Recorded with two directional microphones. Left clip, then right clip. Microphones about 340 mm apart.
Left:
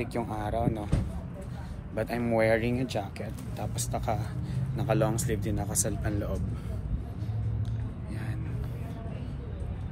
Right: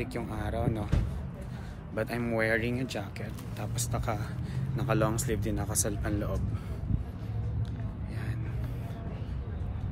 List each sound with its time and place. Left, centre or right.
0.0 s speech: centre
2.0 s speech: centre